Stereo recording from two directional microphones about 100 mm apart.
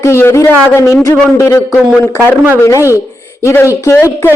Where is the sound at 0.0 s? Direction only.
25° left (ahead or behind).